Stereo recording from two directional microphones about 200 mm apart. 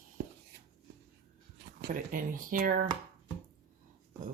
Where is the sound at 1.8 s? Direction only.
45° right (ahead or behind).